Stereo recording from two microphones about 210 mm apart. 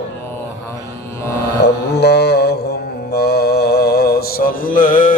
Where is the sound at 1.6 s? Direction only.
50° left (ahead or behind).